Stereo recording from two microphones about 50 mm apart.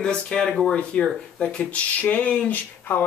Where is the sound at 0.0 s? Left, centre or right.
Centre.